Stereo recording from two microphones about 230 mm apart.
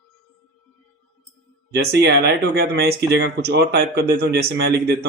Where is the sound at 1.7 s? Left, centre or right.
Right.